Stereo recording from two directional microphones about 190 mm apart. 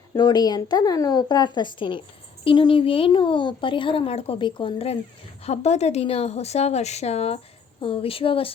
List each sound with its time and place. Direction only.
0.1 s a woman's voice: 20° left (ahead or behind)